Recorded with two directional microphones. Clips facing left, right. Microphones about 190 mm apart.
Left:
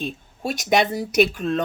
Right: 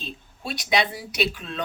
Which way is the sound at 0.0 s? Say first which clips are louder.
Left 8 dB; 45° left (ahead or behind).